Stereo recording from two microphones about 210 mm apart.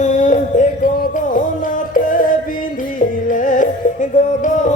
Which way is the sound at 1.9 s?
40° left (ahead or behind).